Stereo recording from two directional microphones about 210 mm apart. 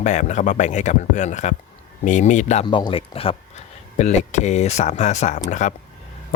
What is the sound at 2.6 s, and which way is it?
Speech, 20° left (ahead or behind).